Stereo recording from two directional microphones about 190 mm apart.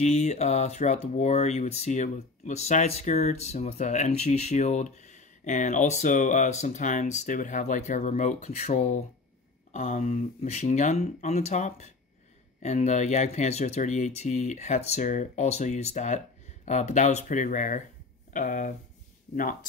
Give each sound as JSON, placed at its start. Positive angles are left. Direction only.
{"t": 0.0, "sound": "speech", "side_deg": 35}